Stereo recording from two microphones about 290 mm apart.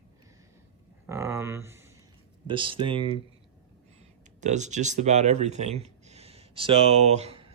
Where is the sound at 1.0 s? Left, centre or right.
Centre.